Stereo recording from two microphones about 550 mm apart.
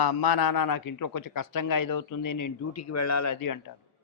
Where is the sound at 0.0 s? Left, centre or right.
Left.